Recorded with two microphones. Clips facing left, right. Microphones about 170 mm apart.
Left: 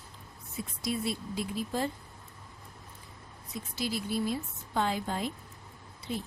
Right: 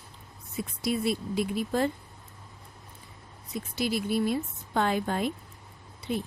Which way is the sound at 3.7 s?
65° right (ahead or behind).